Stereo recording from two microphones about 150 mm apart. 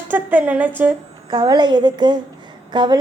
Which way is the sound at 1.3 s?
30° right (ahead or behind).